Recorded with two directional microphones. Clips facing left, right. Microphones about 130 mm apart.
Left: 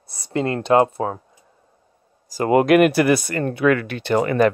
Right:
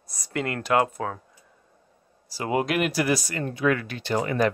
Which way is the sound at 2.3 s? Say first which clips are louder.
Left 10 dB; 50° left (ahead or behind).